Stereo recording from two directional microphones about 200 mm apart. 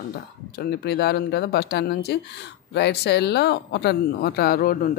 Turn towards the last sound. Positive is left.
turn(degrees=45)  # may be behind; listen again after turning